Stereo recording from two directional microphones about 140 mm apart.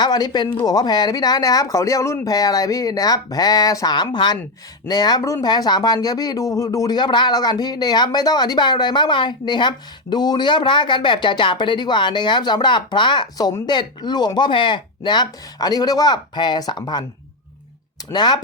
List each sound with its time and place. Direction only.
0.0 s speech: 30° left (ahead or behind)
18.1 s speech: 30° left (ahead or behind)